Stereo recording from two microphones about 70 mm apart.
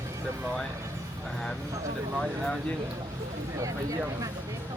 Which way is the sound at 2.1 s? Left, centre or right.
Centre.